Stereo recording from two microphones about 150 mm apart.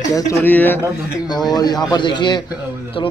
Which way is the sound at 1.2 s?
25° left (ahead or behind).